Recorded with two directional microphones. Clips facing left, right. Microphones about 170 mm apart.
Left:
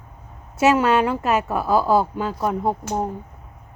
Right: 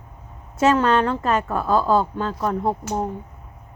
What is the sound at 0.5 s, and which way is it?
A woman's voice, 10° left (ahead or behind).